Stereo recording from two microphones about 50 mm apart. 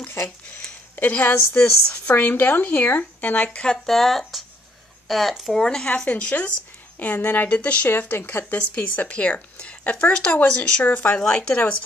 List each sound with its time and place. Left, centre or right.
0.9 s speech: left
1.6 s speech: centre
2.0 s speech: left
3.7 s speech: centre
5.6 s speech: centre
5.9 s speech: left
7.9 s speech: left
8.5 s speech: left
11.2 s speech: centre